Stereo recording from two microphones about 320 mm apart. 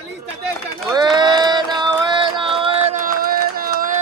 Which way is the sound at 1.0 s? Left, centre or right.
Centre.